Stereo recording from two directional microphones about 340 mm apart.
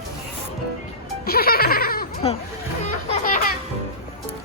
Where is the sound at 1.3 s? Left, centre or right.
Left.